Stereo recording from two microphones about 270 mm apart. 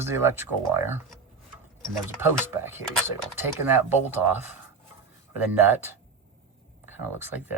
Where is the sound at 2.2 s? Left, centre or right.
Centre.